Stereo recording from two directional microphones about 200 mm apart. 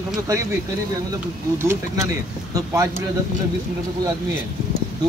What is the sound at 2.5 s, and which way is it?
Speech, 15° right (ahead or behind).